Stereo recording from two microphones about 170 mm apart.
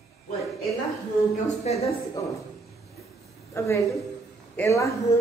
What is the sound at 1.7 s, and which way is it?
Speech, 40° left (ahead or behind).